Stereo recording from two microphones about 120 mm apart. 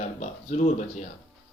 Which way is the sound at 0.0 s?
80° left.